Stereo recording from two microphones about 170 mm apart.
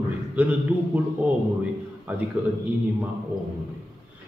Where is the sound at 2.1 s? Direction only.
10° right (ahead or behind).